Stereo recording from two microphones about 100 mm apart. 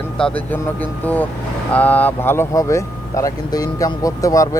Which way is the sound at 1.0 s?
15° left (ahead or behind).